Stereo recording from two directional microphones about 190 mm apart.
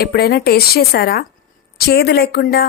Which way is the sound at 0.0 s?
55° left (ahead or behind).